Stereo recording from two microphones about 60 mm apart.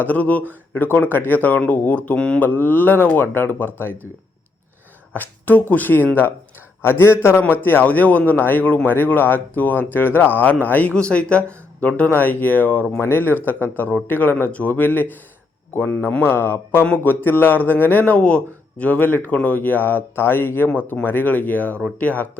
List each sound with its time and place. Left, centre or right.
0.0 s speech: left
2.1 s mantra: centre
2.4 s speech: left
5.1 s speech: left
6.8 s a man's voice: left
16.8 s speech: left
18.2 s speech: centre